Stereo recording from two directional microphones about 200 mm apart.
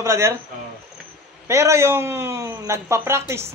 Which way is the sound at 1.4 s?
15° right (ahead or behind).